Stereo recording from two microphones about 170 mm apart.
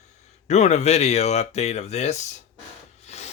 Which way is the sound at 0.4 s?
40° left (ahead or behind).